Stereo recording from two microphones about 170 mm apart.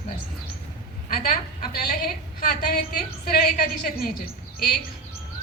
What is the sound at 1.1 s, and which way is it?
A woman's voice, 60° left (ahead or behind).